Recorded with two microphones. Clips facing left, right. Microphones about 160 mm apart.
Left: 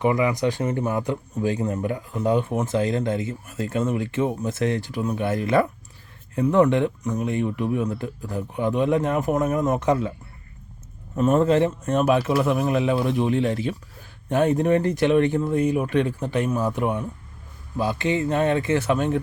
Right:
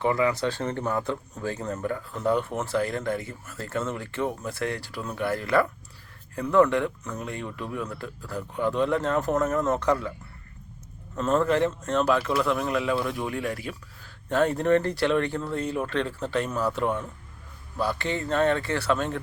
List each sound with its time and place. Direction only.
0.0 s speech: 15° left (ahead or behind)
11.1 s speech: 15° left (ahead or behind)